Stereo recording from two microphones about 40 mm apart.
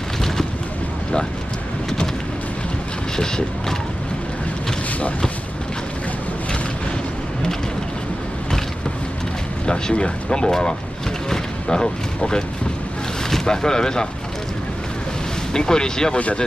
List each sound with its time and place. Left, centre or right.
3.2 s speech: centre
9.7 s speech: left
11.2 s a sound: centre
13.3 s speech: centre
15.5 s speech: centre